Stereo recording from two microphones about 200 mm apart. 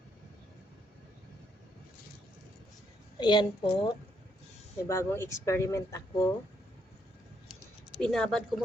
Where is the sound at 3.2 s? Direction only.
20° left (ahead or behind).